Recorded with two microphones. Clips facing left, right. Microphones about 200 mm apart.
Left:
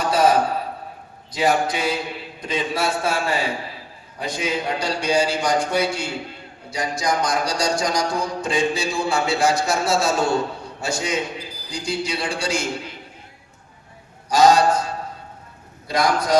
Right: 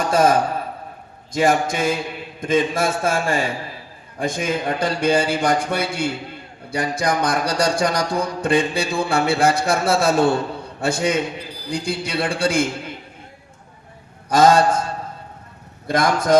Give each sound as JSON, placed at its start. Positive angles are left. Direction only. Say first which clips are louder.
{"t": 0.0, "sound": "a sound", "louder": "right 1 dB", "side_deg": -45}
{"t": 1.3, "sound": "a man's voice", "louder": "right 2 dB", "side_deg": -45}
{"t": 14.3, "sound": "a man's voice", "louder": "right 1 dB", "side_deg": -55}
{"t": 15.9, "sound": "a man's voice", "louder": "right 3 dB", "side_deg": -50}